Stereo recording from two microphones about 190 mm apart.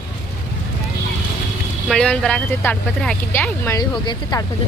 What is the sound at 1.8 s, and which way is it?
Speech, 5° left (ahead or behind).